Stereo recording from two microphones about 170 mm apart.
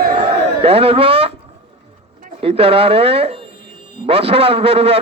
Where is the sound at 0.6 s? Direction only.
35° right (ahead or behind).